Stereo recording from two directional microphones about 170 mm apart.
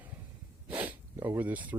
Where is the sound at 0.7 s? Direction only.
10° right (ahead or behind).